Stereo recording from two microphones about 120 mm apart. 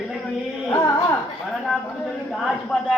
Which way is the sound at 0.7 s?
25° left (ahead or behind).